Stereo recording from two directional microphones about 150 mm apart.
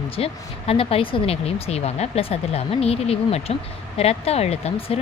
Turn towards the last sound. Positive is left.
turn(degrees=40)  # may be behind; listen again after turning